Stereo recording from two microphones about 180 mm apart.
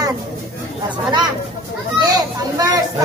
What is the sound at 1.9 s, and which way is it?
Speech, 20° right (ahead or behind).